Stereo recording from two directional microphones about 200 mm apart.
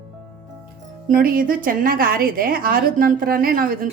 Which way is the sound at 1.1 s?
45° right (ahead or behind).